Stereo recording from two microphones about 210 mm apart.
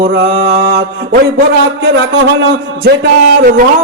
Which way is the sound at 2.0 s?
60° right (ahead or behind).